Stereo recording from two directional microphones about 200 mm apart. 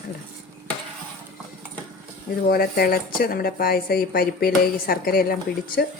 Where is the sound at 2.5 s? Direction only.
50° left (ahead or behind).